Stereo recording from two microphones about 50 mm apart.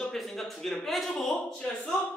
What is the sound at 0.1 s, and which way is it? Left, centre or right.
Speech, centre.